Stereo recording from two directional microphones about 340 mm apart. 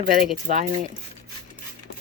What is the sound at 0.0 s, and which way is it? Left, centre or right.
Speech, right.